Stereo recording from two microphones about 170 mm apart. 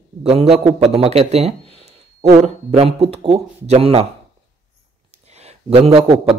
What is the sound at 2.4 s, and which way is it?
A man's voice, 40° right (ahead or behind).